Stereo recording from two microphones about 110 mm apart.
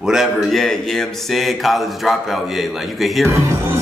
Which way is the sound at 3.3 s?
25° right (ahead or behind).